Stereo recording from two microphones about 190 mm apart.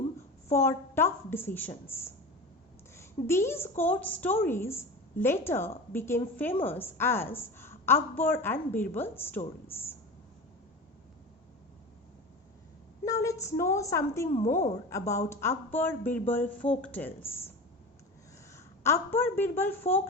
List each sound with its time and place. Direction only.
0.5 s a woman's voice: 15° left (ahead or behind)
13.1 s a woman's voice: 15° left (ahead or behind)
18.5 s a woman's voice: 15° left (ahead or behind)